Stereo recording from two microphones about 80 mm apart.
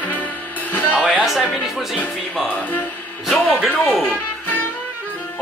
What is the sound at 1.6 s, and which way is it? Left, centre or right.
Speech, centre.